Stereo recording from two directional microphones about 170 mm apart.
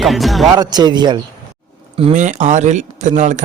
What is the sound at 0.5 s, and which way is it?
Speech, 25° right (ahead or behind).